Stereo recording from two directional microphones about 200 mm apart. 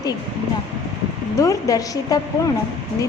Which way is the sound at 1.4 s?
15° left (ahead or behind).